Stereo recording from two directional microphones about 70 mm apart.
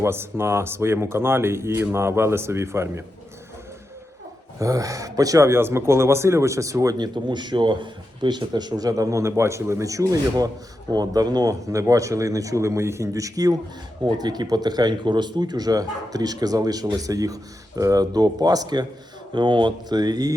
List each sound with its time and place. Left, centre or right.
0.0 s speech: right
4.6 s speech: right
5.5 s speech: right
6.9 s a man's voice: right
10.9 s speech: right
14.0 s speech: right
19.3 s speech: right